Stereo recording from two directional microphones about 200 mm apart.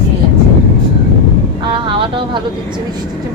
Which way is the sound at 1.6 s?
25° right (ahead or behind).